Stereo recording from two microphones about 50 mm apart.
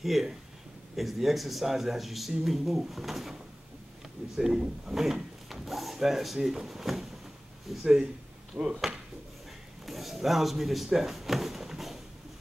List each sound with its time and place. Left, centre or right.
0.0 s speech: centre
4.4 s speech: centre
8.6 s speech: right
9.8 s speech: centre